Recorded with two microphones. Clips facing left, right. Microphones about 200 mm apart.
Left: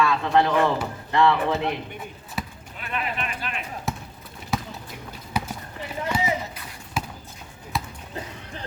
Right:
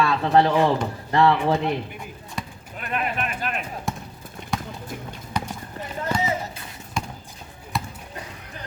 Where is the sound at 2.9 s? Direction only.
45° right (ahead or behind).